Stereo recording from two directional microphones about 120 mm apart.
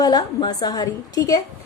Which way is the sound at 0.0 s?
35° left (ahead or behind).